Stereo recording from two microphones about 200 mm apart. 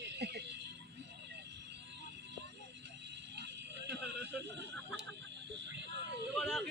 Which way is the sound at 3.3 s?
55° right (ahead or behind).